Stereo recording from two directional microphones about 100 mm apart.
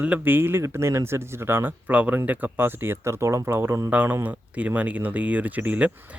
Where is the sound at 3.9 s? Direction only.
15° right (ahead or behind).